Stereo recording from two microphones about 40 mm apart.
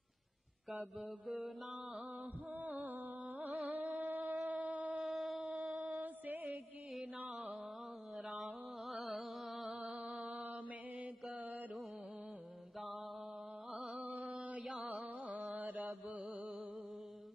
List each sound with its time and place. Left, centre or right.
0.9 s mantra: centre
2.5 s music: right
3.7 s a sound: right
5.0 s a sound: centre
5.8 s music: right
7.2 s music: right
8.2 s music: centre
9.9 s music: centre
11.3 s music: right
13.7 s music: centre
14.9 s music: right